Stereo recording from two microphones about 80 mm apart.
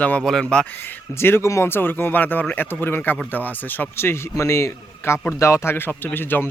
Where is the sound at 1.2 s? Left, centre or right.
Left.